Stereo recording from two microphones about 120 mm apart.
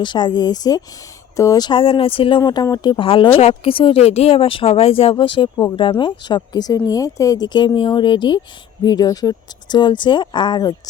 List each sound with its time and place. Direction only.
0.0 s speech: 40° left (ahead or behind)
1.8 s speech: 50° left (ahead or behind)
2.4 s speech: 35° left (ahead or behind)